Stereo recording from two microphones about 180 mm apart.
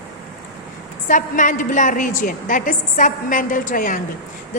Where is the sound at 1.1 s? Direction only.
45° left (ahead or behind).